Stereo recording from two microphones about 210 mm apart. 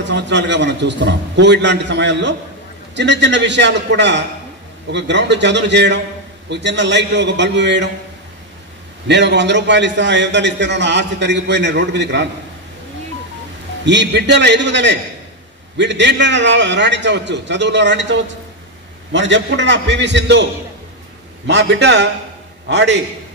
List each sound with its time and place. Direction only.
0.1 s a man's voice: 55° right (ahead or behind)
9.0 s a man's voice: 55° right (ahead or behind)
13.8 s a man's voice: 55° right (ahead or behind)
21.5 s a man's voice: 60° right (ahead or behind)